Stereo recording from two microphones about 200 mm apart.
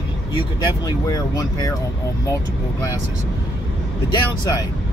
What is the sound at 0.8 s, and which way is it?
Speech, 20° left (ahead or behind).